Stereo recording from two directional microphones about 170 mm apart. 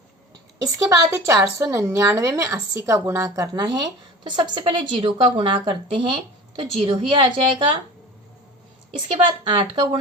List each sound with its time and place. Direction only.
0.6 s a woman's voice: 15° right (ahead or behind)
9.1 s a woman's voice: 30° right (ahead or behind)